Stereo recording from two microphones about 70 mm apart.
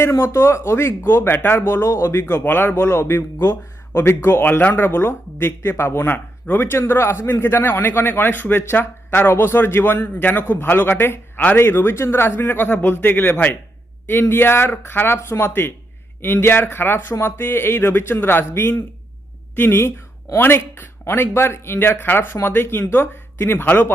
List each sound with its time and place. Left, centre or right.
0.0 s speech: left